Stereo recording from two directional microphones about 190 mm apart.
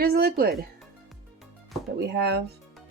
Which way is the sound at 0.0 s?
55° right (ahead or behind).